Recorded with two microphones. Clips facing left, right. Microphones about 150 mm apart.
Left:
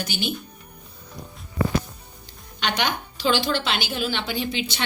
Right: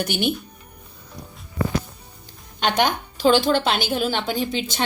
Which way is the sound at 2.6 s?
45° right (ahead or behind).